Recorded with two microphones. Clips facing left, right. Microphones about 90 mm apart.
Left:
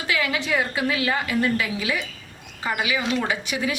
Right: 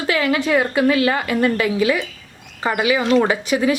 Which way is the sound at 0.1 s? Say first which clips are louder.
Right 7 dB; 45° right (ahead or behind).